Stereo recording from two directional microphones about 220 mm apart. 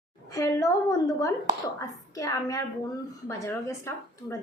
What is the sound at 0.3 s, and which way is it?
A woman's voice, 15° left (ahead or behind).